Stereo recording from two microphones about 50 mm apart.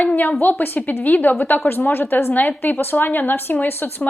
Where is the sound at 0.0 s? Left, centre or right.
Left.